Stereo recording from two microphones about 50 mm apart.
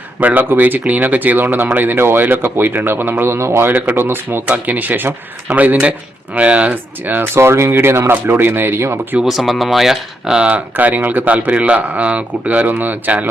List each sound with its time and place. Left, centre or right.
0.2 s a man's voice: right
4.4 s speech: right
7.3 s a man's voice: right
9.1 s speech: right
9.5 s speech: centre
10.4 s speech: right
12.6 s speech: right